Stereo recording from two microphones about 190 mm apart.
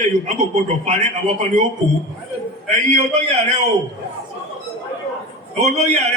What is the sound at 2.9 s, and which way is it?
Speech, 35° right (ahead or behind).